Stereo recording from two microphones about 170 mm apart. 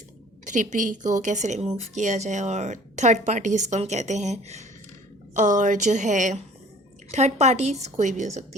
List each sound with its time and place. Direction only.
0.4 s a woman's voice: 45° right (ahead or behind)